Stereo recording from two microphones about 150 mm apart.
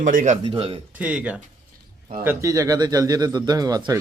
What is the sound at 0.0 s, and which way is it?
Speech, 65° right (ahead or behind).